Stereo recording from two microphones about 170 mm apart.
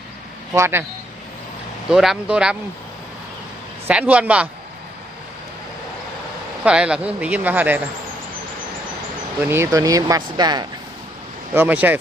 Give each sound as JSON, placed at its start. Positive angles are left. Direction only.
{"t": 0.5, "sound": "speech", "side_deg": -15}
{"t": 1.9, "sound": "a man's voice", "side_deg": -5}
{"t": 3.8, "sound": "speech", "side_deg": -10}
{"t": 6.7, "sound": "speech", "side_deg": -5}
{"t": 9.4, "sound": "speech", "side_deg": -15}
{"t": 11.5, "sound": "speech", "side_deg": -10}